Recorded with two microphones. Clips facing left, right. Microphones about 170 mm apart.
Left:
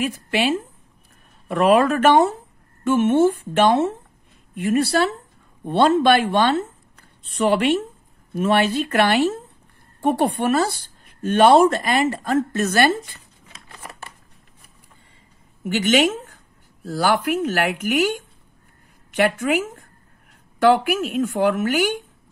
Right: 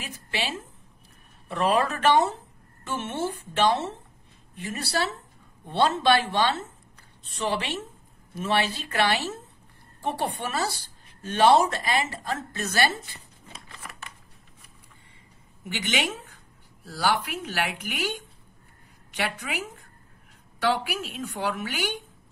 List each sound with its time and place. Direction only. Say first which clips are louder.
0.0 s a woman's voice: left 11 dB; 55° left (ahead or behind)
13.8 s shuffling cards: left 6 dB; 35° left (ahead or behind)
15.6 s speech: left 11 dB; 50° left (ahead or behind)